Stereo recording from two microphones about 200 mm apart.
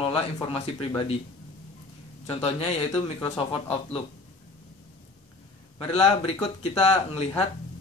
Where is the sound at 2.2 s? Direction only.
30° left (ahead or behind).